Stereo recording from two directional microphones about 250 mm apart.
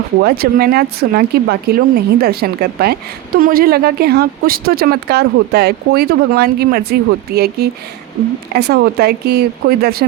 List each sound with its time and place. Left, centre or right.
0.2 s a woman's voice: right